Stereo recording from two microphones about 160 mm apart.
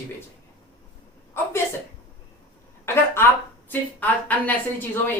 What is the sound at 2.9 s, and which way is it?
A woman's voice, 15° left (ahead or behind).